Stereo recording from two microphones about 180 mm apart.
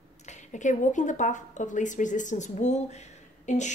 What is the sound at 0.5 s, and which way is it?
A woman's voice, 45° left (ahead or behind).